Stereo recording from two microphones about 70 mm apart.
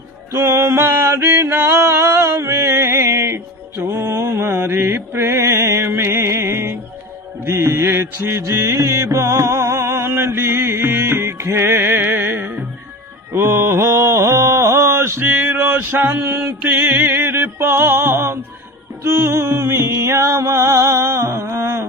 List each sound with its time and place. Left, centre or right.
0.3 s music: right
13.3 s mantra: right
15.5 s male singing: right
16.6 s music: right